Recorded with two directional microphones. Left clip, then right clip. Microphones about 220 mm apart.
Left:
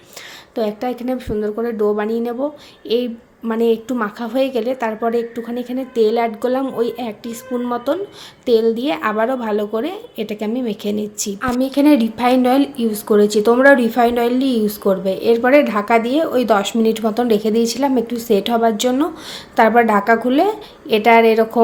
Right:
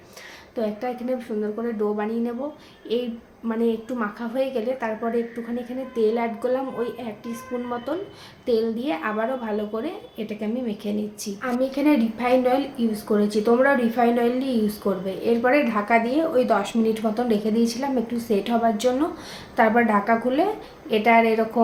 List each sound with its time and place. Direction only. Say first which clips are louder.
0.5 s a woman's voice: left 6 dB; 45° left (ahead or behind)